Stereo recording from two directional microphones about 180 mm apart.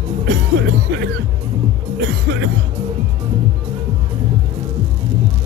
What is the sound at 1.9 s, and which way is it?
Music, 85° right.